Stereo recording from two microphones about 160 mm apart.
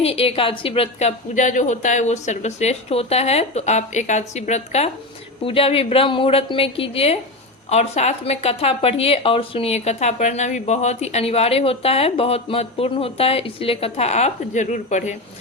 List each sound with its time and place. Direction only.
0.0 s a woman's voice: 40° left (ahead or behind)